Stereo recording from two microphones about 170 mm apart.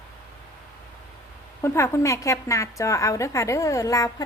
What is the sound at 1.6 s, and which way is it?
A woman's voice, 15° left (ahead or behind).